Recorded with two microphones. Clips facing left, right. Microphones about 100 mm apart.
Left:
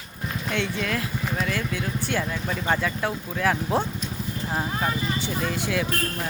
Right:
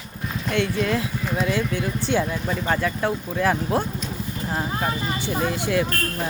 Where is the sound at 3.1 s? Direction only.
15° right (ahead or behind).